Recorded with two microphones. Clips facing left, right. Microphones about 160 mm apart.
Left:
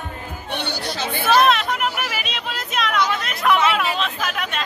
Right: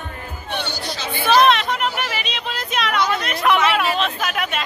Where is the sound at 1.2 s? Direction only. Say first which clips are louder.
Right 2 dB; 5° left (ahead or behind).